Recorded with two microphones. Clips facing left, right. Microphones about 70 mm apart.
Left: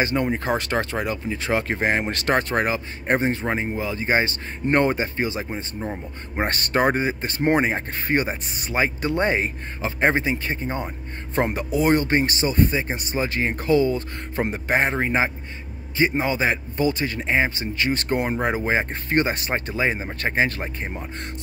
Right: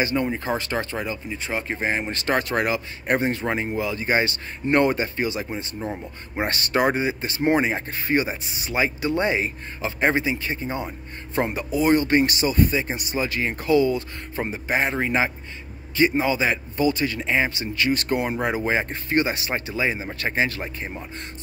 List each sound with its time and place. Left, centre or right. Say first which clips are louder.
0.0 s speech: left 1 dB; left
1.3 s speech: left 4 dB; left
2.5 s speech: even; left
12.1 s speech: right 1 dB; left
15.0 s speech: left 1 dB; left